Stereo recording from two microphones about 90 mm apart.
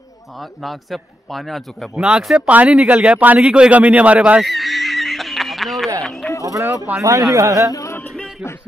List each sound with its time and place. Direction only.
0.4 s a man's voice: centre (ahead or behind)
4.4 s fowl: centre (ahead or behind)
6.0 s a sound: centre (ahead or behind)
6.4 s a sound: 35° right (ahead or behind)
7.0 s a man's voice: 35° right (ahead or behind)
7.7 s music: 35° left (ahead or behind)